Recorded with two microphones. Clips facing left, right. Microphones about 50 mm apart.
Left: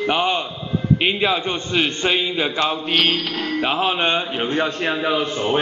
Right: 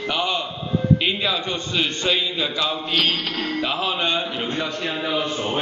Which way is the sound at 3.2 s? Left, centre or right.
Centre.